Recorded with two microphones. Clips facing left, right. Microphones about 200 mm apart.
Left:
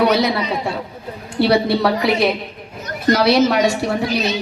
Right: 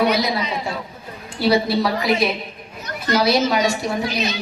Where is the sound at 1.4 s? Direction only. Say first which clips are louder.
Left 3 dB; 65° left (ahead or behind).